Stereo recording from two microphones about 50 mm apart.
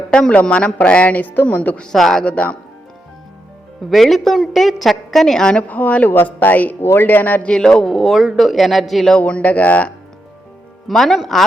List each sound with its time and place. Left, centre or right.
0.1 s speech: centre; by 1.8 s left
1.8 s speech: centre
2.2 s speech: left
3.8 s a woman's voice: centre
5.6 s speech: left
6.8 s speech: left
7.5 s a woman's voice: centre
9.2 s speech: left
10.8 s a woman's voice: centre